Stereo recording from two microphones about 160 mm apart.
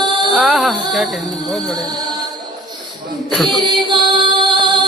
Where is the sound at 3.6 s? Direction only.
30° right (ahead or behind).